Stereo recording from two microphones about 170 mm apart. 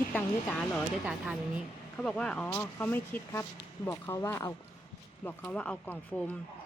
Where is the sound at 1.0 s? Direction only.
5° right (ahead or behind).